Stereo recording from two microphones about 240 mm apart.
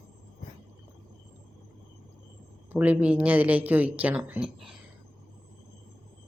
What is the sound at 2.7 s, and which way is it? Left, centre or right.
Speech, centre.